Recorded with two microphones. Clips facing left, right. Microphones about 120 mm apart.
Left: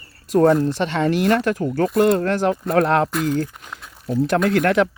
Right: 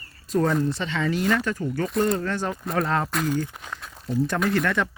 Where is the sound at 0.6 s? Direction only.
80° left.